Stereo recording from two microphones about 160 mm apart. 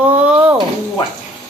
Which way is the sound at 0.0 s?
10° right (ahead or behind).